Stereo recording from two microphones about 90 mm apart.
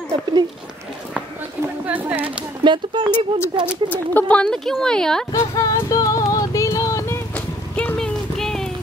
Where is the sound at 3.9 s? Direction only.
20° left (ahead or behind).